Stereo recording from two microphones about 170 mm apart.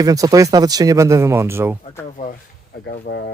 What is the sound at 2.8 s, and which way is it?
Speech, 70° left (ahead or behind).